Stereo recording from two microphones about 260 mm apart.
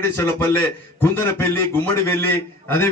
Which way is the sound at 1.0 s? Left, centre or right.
Centre.